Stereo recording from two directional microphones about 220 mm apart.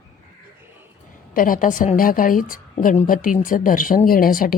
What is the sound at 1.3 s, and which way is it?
A woman's voice, 40° left (ahead or behind).